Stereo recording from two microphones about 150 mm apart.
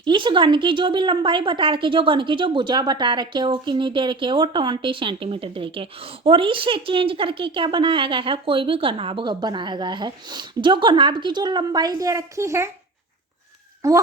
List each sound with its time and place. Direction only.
0.0 s a woman's voice: 30° right (ahead or behind)
13.8 s speech: 20° right (ahead or behind)